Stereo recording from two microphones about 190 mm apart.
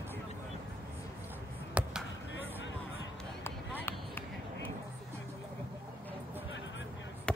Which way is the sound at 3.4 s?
10° left (ahead or behind).